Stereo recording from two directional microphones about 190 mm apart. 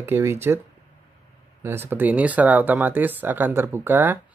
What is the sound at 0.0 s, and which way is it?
Speech, 15° right (ahead or behind).